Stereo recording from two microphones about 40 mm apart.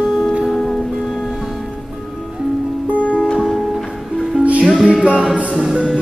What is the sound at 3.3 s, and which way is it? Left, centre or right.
Music, centre.